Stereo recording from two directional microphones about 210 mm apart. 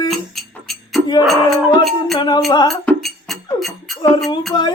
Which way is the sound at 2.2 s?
20° left (ahead or behind).